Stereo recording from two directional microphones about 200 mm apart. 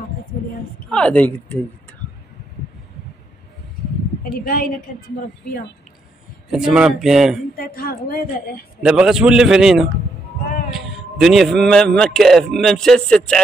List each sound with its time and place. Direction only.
0.3 s a sound: 50° left (ahead or behind)
0.8 s a woman's voice: 5° left (ahead or behind)
4.2 s a woman's voice: 45° left (ahead or behind)
6.5 s a man's voice: 5° right (ahead or behind)
7.5 s a woman's voice: 50° left (ahead or behind)
8.8 s a man's voice: 5° right (ahead or behind)